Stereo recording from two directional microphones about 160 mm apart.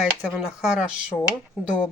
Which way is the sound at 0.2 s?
5° right (ahead or behind).